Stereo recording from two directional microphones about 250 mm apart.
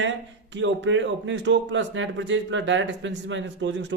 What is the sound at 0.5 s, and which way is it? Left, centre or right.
Speech, right.